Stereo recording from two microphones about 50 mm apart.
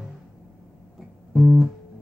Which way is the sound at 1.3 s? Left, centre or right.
Centre.